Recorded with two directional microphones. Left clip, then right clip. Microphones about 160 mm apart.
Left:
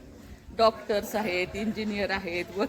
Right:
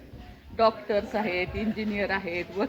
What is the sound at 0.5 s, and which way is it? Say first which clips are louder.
A woman's voice: even; 15° left (ahead or behind).